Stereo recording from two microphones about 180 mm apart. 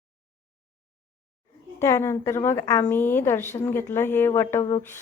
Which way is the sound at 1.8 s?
15° left (ahead or behind).